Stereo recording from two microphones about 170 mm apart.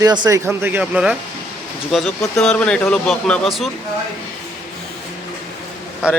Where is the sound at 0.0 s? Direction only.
25° right (ahead or behind); by 3.7 s 5° left (ahead or behind).